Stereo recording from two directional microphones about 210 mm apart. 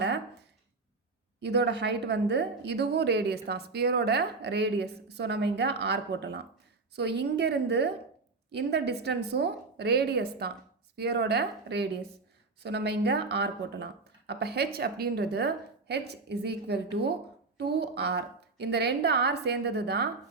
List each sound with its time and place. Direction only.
1.4 s a woman's voice: 55° right (ahead or behind)